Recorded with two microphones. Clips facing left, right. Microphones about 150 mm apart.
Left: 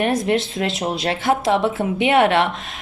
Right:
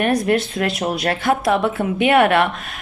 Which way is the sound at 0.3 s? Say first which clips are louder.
Right 1 dB; 25° left (ahead or behind).